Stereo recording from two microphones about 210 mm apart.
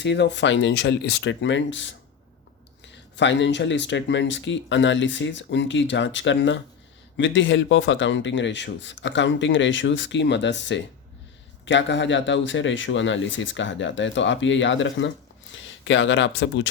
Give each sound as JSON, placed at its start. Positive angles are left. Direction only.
{"t": 0.0, "sound": "speech", "side_deg": 55}
{"t": 3.2, "sound": "speech", "side_deg": 60}